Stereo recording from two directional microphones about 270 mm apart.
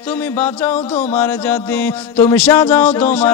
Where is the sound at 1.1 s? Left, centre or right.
Centre.